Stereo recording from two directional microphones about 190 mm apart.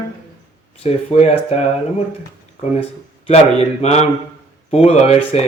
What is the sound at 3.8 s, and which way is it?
Speech, 35° left (ahead or behind).